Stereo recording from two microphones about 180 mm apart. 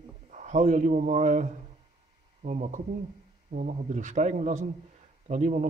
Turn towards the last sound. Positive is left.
turn(degrees=-45)  # may be behind; listen again after turning